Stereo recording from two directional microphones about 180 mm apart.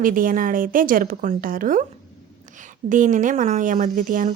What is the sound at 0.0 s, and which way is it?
Speech, 50° right (ahead or behind).